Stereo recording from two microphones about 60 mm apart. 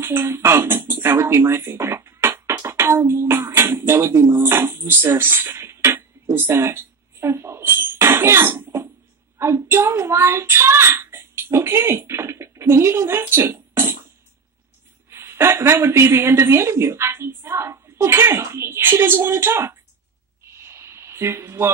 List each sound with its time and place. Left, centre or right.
0.0 s speech: right
1.6 s music: right
9.4 s child singing: right
10.4 s a sound: right
13.4 s beatboxing: right
15.0 s a woman's voice: right
20.4 s a sound: right